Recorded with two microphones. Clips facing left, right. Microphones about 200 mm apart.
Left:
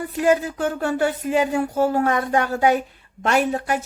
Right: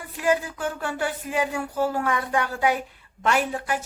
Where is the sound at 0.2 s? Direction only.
40° left (ahead or behind).